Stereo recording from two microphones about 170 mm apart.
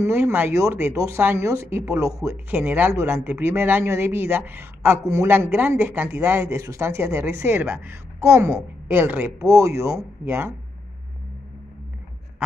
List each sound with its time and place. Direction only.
0.0 s speech: 15° right (ahead or behind)